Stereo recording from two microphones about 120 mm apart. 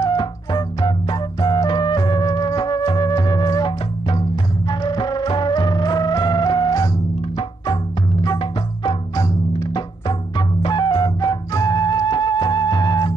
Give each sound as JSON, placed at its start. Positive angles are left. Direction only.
{"t": 0.2, "sound": "music", "side_deg": 40}
{"t": 9.8, "sound": "music", "side_deg": 35}
{"t": 10.7, "sound": "flute", "side_deg": 35}